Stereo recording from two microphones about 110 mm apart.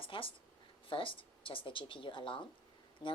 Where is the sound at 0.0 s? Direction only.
55° left (ahead or behind).